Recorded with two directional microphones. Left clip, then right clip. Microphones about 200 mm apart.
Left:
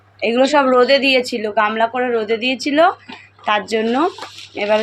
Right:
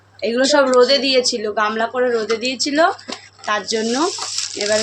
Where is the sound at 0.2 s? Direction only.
5° left (ahead or behind).